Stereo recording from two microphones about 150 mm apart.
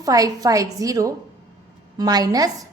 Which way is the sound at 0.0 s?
25° right (ahead or behind).